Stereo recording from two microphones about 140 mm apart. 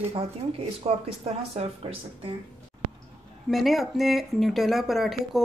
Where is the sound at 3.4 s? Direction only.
Centre (ahead or behind).